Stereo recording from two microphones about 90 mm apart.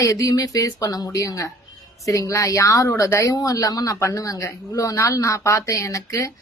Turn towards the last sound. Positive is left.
turn(degrees=35)  # may be behind; listen again after turning